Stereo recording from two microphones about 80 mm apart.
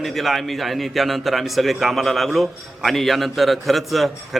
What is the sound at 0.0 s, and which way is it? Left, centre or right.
A man's voice, centre.